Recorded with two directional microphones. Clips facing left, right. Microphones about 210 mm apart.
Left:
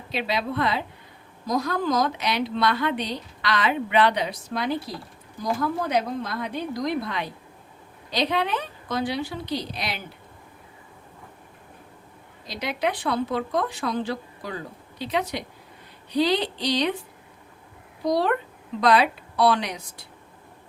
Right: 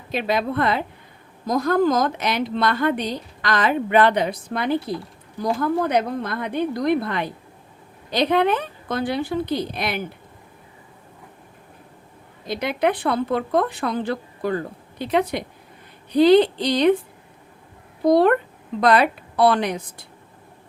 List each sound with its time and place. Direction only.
0.1 s a woman's voice: 50° right (ahead or behind)
5.8 s a woman's voice: 55° right (ahead or behind)
12.5 s a woman's voice: 55° right (ahead or behind)
18.0 s a woman's voice: 55° right (ahead or behind)